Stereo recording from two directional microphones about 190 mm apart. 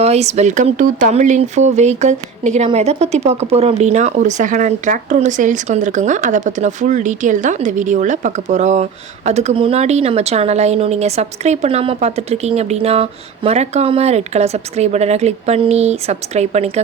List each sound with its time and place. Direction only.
0.0 s speech: 35° right (ahead or behind)